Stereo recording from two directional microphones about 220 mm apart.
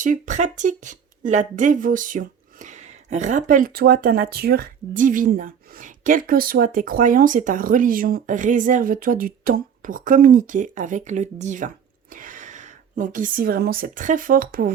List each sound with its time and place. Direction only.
0.0 s speech: 35° right (ahead or behind)